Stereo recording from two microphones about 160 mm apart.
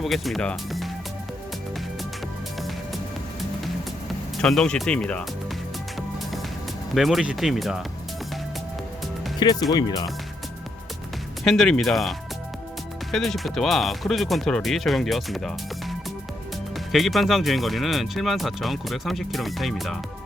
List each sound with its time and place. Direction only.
0.0 s speech: centre (ahead or behind)
4.4 s speech: 5° left (ahead or behind)
6.9 s speech: centre (ahead or behind)
9.4 s speech: 25° left (ahead or behind)
11.4 s speech: centre (ahead or behind)
16.7 s speech: centre (ahead or behind)